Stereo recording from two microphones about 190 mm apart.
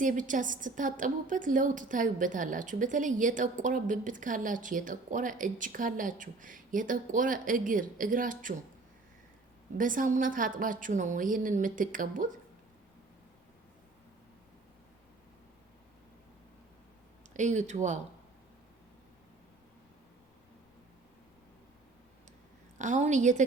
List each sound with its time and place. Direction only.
0.0 s a woman's voice: 45° right (ahead or behind)
9.7 s a woman's voice: 45° right (ahead or behind)
17.3 s speech: 40° right (ahead or behind)
22.8 s speech: 40° right (ahead or behind)